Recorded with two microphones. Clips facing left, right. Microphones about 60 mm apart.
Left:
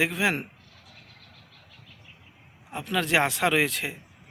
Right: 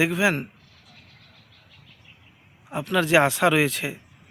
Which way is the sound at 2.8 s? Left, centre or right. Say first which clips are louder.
Right 5 dB; centre.